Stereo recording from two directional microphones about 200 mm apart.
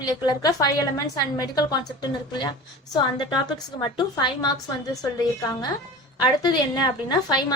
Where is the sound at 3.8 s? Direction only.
20° left (ahead or behind).